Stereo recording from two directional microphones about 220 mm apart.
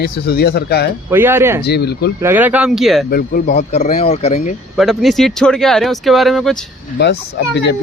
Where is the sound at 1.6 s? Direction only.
50° left (ahead or behind).